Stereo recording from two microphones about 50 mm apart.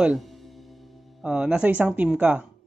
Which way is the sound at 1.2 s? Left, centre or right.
Centre.